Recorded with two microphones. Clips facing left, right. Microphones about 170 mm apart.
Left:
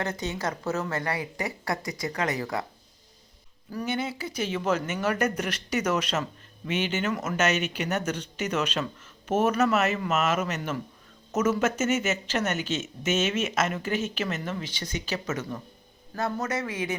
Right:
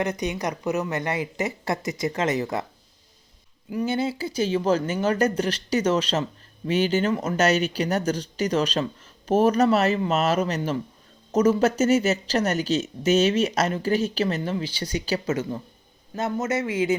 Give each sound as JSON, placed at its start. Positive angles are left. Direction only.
{"t": 0.0, "sound": "speech", "side_deg": -20}
{"t": 3.8, "sound": "speech", "side_deg": -30}